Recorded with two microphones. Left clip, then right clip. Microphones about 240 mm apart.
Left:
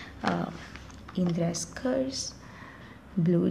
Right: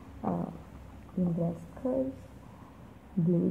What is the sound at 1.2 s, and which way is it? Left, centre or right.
Speech, left.